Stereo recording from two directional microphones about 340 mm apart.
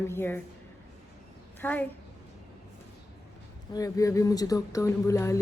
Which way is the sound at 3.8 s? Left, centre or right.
Centre.